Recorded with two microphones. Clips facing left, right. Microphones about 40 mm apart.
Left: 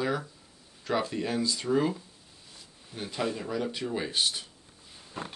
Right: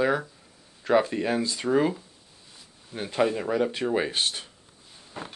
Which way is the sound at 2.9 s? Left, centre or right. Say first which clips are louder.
Right 7 dB; right.